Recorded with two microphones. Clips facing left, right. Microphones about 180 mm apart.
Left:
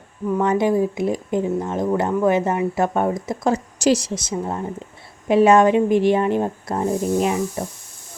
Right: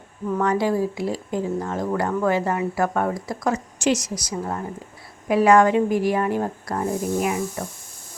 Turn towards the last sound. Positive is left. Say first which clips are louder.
# left 3 dB
turn(degrees=25)  # may be behind; listen again after turning